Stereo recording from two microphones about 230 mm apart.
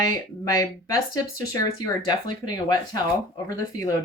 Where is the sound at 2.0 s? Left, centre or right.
Centre.